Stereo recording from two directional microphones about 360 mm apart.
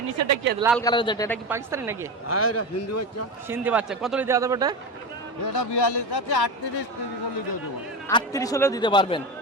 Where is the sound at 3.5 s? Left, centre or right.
Centre.